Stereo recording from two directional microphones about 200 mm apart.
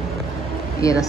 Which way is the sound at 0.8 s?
15° left (ahead or behind).